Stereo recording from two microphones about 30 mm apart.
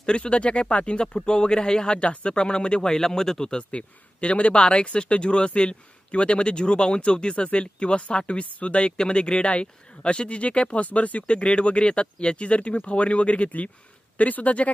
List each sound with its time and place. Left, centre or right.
0.0 s speech: left
1.0 s speech: left
3.5 s speech: left
11.2 s speech: left
14.1 s speech: left